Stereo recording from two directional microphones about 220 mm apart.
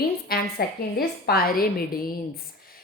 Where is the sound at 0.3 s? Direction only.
45° left (ahead or behind).